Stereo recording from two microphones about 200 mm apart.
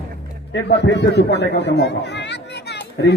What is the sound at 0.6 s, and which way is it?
Speech, 60° left (ahead or behind).